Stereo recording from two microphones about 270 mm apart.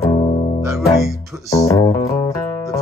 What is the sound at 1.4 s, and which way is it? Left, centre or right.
Music, centre.